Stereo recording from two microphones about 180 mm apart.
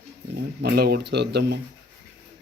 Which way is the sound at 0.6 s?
60° right (ahead or behind).